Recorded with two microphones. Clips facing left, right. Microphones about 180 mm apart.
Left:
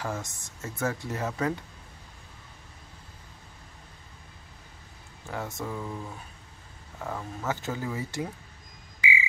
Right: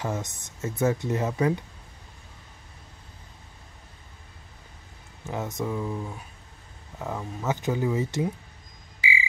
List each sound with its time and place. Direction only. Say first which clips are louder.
0.0 s speech: right 3 dB; 20° right (ahead or behind)
5.3 s speech: right 4 dB; 20° right (ahead or behind)